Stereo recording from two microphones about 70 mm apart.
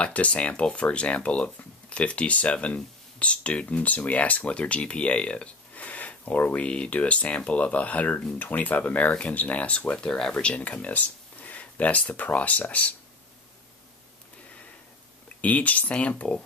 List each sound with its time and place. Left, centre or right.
0.0 s speech: centre
15.4 s speech: left